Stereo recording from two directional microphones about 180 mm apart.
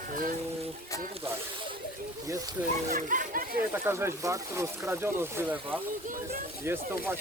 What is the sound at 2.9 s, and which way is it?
Speech, 50° right (ahead or behind).